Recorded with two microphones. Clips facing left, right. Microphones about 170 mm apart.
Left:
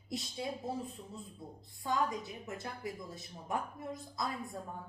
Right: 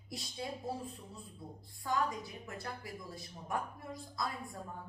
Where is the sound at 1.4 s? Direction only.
20° left (ahead or behind).